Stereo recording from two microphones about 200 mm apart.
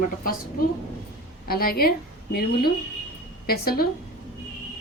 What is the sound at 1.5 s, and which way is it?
Speech, 50° left (ahead or behind).